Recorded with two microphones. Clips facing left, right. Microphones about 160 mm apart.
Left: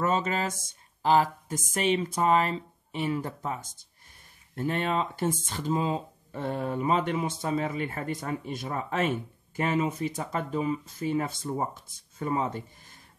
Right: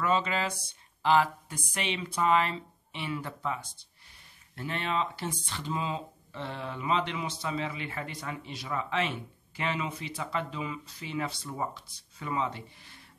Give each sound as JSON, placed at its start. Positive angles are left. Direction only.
{"t": 0.0, "sound": "speech", "side_deg": 45}